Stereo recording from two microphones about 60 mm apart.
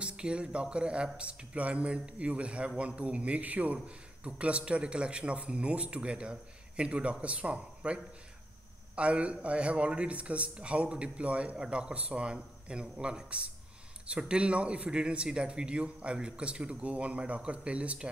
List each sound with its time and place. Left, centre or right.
0.0 s speech: centre